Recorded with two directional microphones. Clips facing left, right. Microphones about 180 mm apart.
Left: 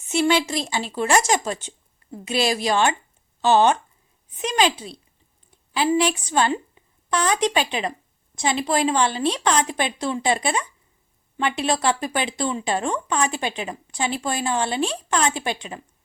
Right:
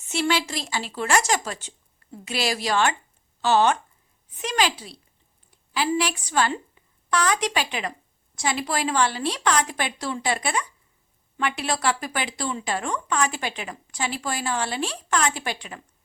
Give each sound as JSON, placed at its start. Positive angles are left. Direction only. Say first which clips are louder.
{"t": 0.1, "sound": "speech", "louder": "left 5 dB", "side_deg": 20}